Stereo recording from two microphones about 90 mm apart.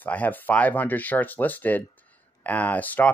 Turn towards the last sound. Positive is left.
turn(degrees=20)  # may be behind; listen again after turning